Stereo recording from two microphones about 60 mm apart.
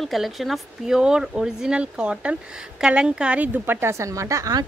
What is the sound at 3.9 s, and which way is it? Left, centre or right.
Speech, right.